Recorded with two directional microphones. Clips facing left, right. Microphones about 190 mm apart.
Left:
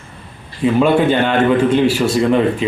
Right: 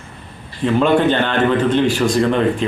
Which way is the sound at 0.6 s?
10° left (ahead or behind).